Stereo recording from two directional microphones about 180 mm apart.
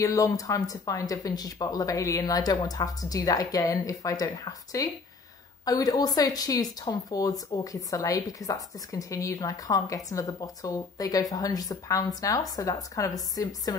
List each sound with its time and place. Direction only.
0.0 s a woman's voice: 20° left (ahead or behind)